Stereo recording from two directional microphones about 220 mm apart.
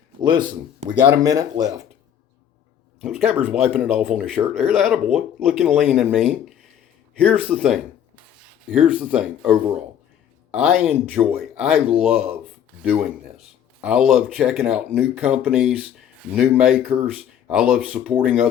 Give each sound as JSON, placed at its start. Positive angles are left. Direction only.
{"t": 0.2, "sound": "speech", "side_deg": -20}
{"t": 3.0, "sound": "speech", "side_deg": -5}
{"t": 7.5, "sound": "a sound", "side_deg": 0}
{"t": 8.7, "sound": "speech", "side_deg": -5}
{"t": 12.8, "sound": "a sound", "side_deg": -5}
{"t": 13.8, "sound": "speech", "side_deg": 0}